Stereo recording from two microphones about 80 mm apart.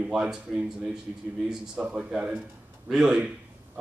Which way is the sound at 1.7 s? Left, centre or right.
Centre.